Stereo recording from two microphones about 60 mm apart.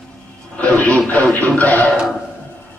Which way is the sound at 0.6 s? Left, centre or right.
Left.